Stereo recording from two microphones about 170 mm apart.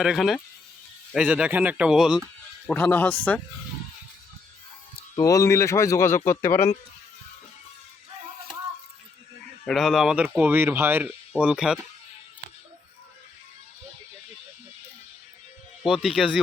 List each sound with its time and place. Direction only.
0.0 s speech: centre (ahead or behind)
2.6 s a man's voice: 10° left (ahead or behind)
5.2 s a man's voice: 20° left (ahead or behind)
9.6 s speech: centre (ahead or behind)
15.9 s speech: centre (ahead or behind)